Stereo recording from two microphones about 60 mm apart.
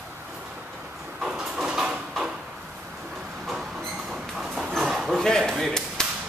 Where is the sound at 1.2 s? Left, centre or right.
Centre.